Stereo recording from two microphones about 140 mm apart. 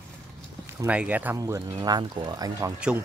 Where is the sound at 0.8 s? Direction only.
10° right (ahead or behind).